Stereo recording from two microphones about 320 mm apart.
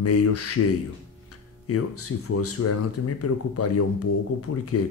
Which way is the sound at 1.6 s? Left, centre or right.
Left.